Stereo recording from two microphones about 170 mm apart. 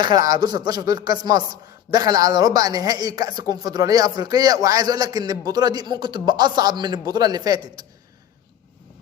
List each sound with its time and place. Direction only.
0.0 s a man's voice: 25° right (ahead or behind)